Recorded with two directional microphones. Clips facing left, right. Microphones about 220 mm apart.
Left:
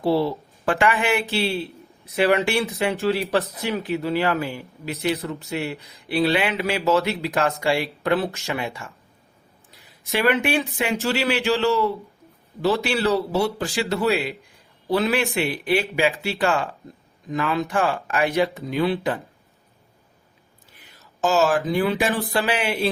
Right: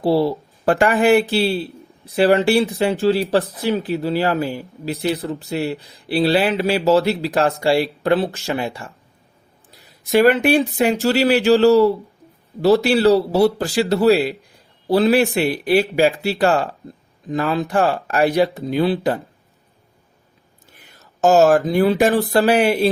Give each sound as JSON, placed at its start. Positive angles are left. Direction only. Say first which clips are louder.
{"t": 0.0, "sound": "speech", "louder": "right 4 dB", "side_deg": -35}
{"t": 10.1, "sound": "speech", "louder": "right 7 dB", "side_deg": -40}
{"t": 21.2, "sound": "speech", "louder": "right 7 dB", "side_deg": -45}